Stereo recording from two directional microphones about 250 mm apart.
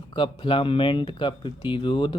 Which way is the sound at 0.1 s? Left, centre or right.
Centre.